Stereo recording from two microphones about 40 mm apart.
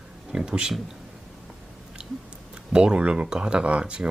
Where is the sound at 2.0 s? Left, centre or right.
Right.